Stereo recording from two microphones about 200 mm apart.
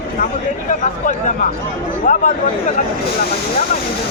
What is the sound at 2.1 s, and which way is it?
Speech, 40° left (ahead or behind).